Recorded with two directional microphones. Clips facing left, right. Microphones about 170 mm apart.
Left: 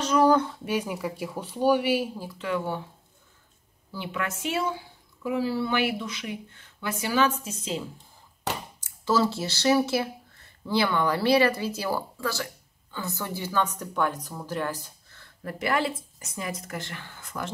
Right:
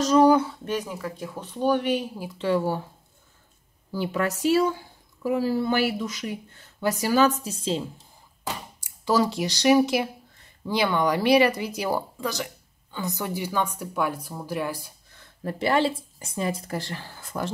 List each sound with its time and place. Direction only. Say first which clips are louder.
0.2 s speech: right 2 dB; 10° right (ahead or behind)
0.7 s speech: left 1 dB; 10° left (ahead or behind)
2.3 s speech: right 6 dB; 35° right (ahead or behind)
3.9 s speech: right 6 dB; 40° right (ahead or behind)
8.8 s speech: right 1 dB; 15° right (ahead or behind)
15.4 s speech: right 4 dB; 25° right (ahead or behind)